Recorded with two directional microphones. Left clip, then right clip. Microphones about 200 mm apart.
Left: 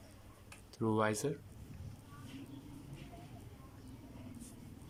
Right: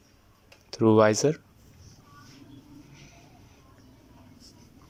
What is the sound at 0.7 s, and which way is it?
Speech, 35° right (ahead or behind).